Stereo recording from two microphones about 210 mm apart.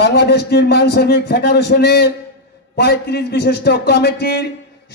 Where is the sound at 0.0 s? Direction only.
50° left (ahead or behind).